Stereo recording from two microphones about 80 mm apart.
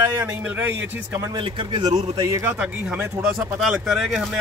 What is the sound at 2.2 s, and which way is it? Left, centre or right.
Speech, right.